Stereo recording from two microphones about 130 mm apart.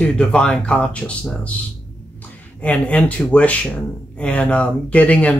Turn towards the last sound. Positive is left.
turn(degrees=10)  # may be behind; listen again after turning